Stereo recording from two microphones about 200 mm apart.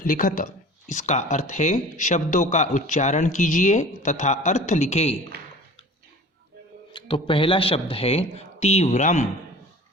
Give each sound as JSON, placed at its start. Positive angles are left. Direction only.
{"t": 0.0, "sound": "speech", "side_deg": 40}
{"t": 6.9, "sound": "speech", "side_deg": 25}